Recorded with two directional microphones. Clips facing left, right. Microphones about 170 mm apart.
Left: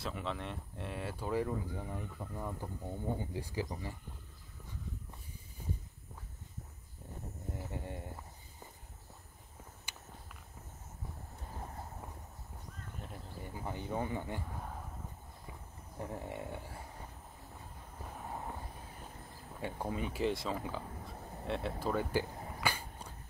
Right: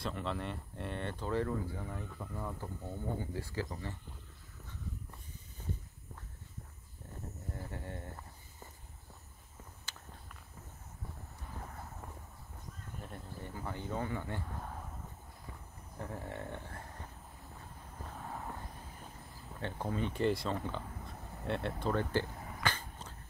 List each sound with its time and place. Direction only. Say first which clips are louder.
0.0 s speech: right 1 dB; centre (ahead or behind)
5.6 s walk: even; 10° left (ahead or behind)
7.5 s speech: left 2 dB; 15° left (ahead or behind)
13.0 s insect: right 1 dB; centre (ahead or behind)
13.5 s speech: left 1 dB; 15° left (ahead or behind)
16.0 s speech: left 1 dB; 15° left (ahead or behind)
18.0 s a sound: left 1 dB; 15° left (ahead or behind)
19.6 s speech: right 1 dB; 10° left (ahead or behind)
22.6 s dog: even; 10° left (ahead or behind)